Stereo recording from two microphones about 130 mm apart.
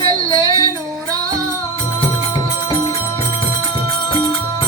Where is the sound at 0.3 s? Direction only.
25° right (ahead or behind).